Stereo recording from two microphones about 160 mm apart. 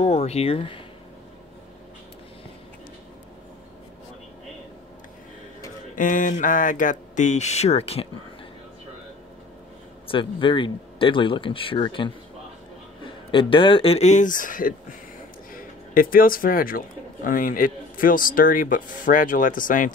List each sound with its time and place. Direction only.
0.0 s speech: 45° left (ahead or behind)
5.9 s speech: 55° left (ahead or behind); by 8.1 s 40° left (ahead or behind)
10.0 s speech: 35° left (ahead or behind); by 19.9 s 55° left (ahead or behind)